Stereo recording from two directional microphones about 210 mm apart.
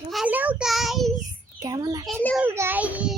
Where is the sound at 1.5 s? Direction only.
15° right (ahead or behind).